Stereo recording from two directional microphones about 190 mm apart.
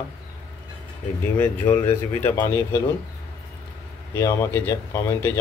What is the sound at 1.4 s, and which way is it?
A man's voice, 10° left (ahead or behind).